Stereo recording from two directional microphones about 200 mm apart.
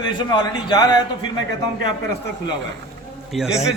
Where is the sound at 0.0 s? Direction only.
20° left (ahead or behind).